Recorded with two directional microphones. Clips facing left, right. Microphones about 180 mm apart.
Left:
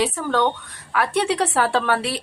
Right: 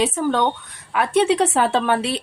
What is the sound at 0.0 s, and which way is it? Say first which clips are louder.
A woman's voice: right 1 dB; 20° right (ahead or behind).